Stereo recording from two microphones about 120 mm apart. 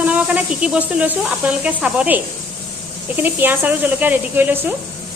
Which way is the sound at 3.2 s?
15° right (ahead or behind).